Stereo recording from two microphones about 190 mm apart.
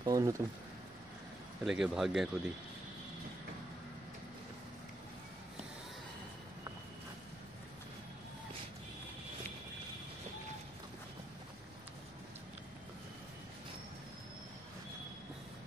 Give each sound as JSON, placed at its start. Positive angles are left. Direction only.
{"t": 0.0, "sound": "speech", "side_deg": -20}
{"t": 1.6, "sound": "speech", "side_deg": 0}